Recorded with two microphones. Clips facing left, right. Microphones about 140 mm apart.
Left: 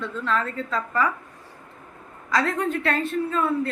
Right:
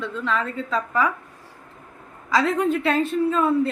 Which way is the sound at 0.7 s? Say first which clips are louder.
Right 2 dB; 15° right (ahead or behind).